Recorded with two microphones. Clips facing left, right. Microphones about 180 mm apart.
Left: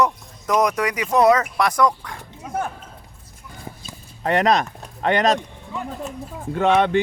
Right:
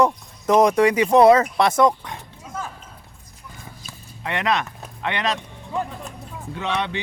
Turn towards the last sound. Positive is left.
turn(degrees=50)  # may be behind; listen again after turning